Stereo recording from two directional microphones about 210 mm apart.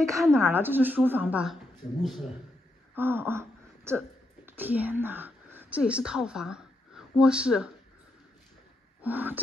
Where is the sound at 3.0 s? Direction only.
10° right (ahead or behind).